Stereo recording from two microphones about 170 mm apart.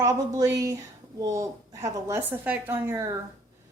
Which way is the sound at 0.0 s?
20° right (ahead or behind).